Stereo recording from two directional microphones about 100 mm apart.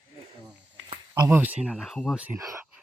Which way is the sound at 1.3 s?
15° right (ahead or behind).